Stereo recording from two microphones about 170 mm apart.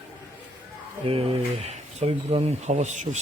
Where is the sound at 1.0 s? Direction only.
35° right (ahead or behind).